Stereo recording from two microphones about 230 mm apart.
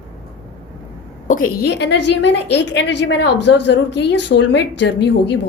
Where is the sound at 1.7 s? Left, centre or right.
Left.